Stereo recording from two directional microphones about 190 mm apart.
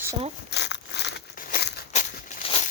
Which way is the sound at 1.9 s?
40° left (ahead or behind).